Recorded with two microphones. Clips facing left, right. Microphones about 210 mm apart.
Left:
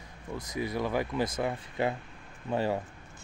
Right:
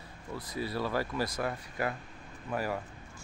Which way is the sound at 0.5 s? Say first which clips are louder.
Left 2 dB; 20° left (ahead or behind).